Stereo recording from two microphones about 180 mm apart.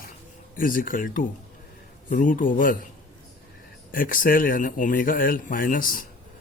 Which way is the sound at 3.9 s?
50° left (ahead or behind).